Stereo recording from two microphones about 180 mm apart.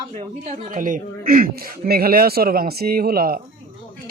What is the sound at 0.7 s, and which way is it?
Speech, 50° right (ahead or behind).